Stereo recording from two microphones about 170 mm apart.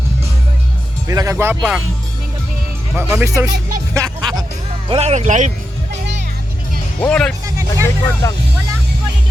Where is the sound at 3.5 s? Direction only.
60° right (ahead or behind).